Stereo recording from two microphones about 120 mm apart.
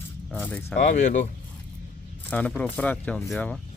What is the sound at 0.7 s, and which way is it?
Speech, 85° left.